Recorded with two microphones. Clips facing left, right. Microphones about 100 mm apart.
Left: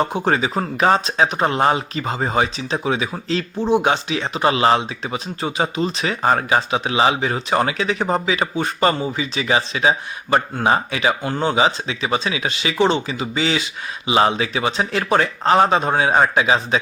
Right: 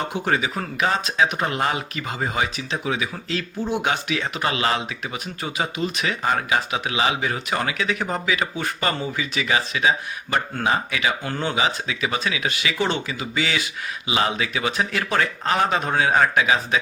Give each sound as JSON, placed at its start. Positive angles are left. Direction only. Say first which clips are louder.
{"t": 0.0, "sound": "speech", "louder": "left 4 dB", "side_deg": 35}